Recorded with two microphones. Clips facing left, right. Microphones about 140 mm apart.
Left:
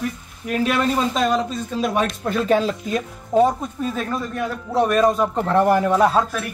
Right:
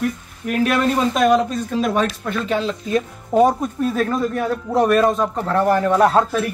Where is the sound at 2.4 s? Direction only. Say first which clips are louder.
Left 4 dB; 45° left (ahead or behind).